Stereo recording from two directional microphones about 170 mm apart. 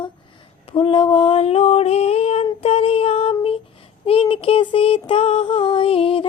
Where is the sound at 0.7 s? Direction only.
30° left (ahead or behind).